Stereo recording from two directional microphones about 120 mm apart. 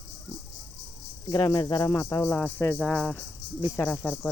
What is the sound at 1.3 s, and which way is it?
Speech, 40° left (ahead or behind).